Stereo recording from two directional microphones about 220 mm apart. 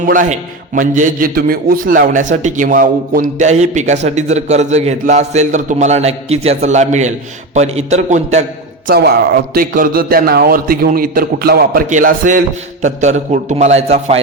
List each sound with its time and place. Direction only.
0.1 s a man's voice: 35° right (ahead or behind)
8.9 s a man's voice: 45° right (ahead or behind)